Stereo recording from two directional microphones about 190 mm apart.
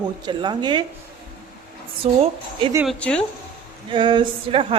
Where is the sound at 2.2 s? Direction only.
25° right (ahead or behind).